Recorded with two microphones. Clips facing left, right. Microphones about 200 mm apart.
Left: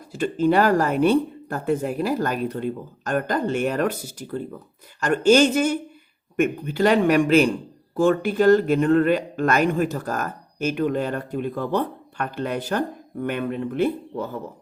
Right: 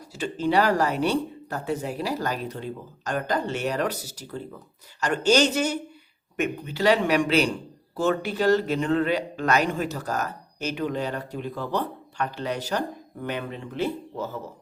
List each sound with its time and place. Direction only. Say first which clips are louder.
0.1 s a man's voice: left 5 dB; 50° left (ahead or behind)